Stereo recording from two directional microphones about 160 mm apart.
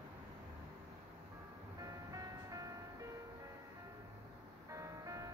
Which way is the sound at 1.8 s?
20° right (ahead or behind).